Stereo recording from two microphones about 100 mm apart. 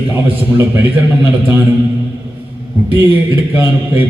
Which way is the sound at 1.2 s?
20° right (ahead or behind).